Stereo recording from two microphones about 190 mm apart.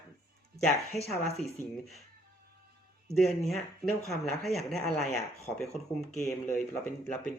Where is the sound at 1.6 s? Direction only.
40° left (ahead or behind).